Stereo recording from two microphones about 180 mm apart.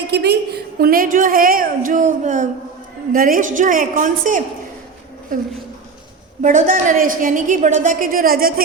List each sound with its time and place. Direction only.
0.1 s a woman's voice: 65° right (ahead or behind); by 4.4 s 45° right (ahead or behind)
6.4 s a woman's voice: 45° right (ahead or behind)